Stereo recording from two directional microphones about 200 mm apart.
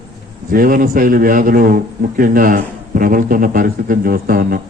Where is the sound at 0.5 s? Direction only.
45° right (ahead or behind).